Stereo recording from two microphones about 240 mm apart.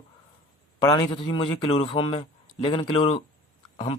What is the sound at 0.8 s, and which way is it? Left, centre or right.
Speech, centre.